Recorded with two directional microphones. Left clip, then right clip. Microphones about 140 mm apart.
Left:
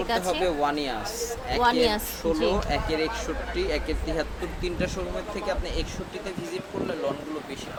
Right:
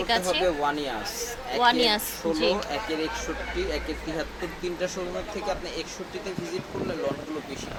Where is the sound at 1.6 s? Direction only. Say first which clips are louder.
Right 1 dB; centre (ahead or behind).